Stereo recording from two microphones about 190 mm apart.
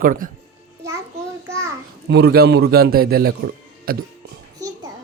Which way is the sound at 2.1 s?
60° right (ahead or behind).